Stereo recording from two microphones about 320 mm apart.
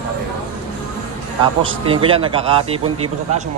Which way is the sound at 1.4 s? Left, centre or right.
Centre.